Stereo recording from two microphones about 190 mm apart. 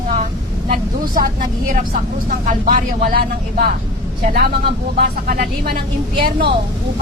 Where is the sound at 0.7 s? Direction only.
50° right (ahead or behind).